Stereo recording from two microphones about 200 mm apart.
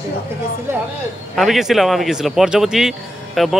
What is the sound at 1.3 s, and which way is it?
A man's voice, centre (ahead or behind).